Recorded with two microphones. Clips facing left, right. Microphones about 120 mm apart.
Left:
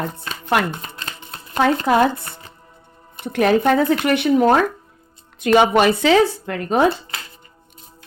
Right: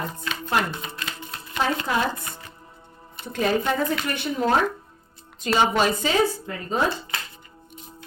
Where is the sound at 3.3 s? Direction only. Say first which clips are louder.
Left 7 dB; 65° left (ahead or behind).